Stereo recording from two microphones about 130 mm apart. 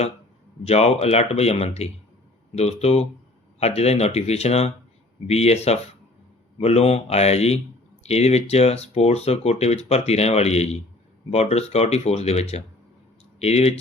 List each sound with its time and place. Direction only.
0.6 s speech: 55° left (ahead or behind)